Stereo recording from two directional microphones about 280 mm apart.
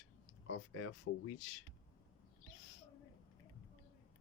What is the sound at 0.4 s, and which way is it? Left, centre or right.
Speech, left.